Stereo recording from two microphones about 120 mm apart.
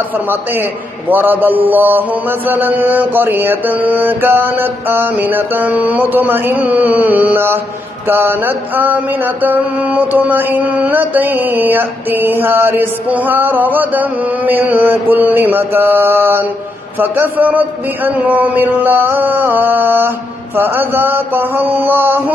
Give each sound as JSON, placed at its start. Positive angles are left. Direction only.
{"t": 0.3, "sound": "mantra", "side_deg": -15}